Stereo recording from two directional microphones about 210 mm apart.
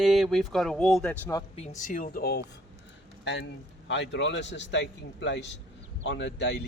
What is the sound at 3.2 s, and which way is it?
A man's voice, 60° left (ahead or behind).